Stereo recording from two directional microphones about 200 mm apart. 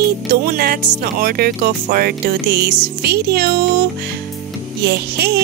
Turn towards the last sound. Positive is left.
turn(degrees=-55)  # may be behind; listen again after turning